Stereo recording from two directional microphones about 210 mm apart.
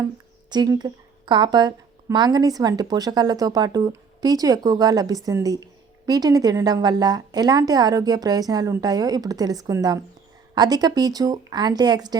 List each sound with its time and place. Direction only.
0.5 s a woman's voice: 20° right (ahead or behind)